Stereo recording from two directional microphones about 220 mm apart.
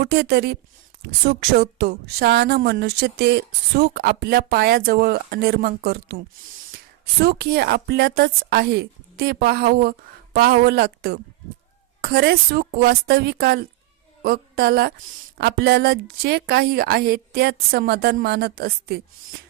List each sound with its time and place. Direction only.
0.0 s speech: 45° right (ahead or behind)